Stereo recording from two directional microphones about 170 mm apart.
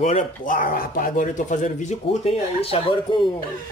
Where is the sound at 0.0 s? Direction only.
45° left (ahead or behind); by 3.3 s 30° left (ahead or behind).